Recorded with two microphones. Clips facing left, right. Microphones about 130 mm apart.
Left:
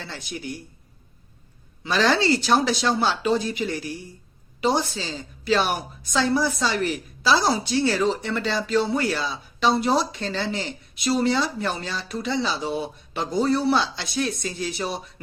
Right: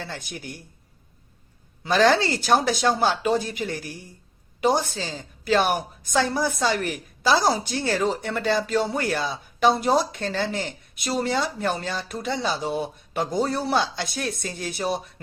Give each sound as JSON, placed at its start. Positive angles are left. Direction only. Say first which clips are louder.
{"t": 0.0, "sound": "speech", "louder": "even", "side_deg": -50}
{"t": 1.8, "sound": "speech", "louder": "right 2 dB", "side_deg": -50}